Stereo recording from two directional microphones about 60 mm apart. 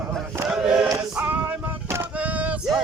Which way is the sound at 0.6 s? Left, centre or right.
Centre.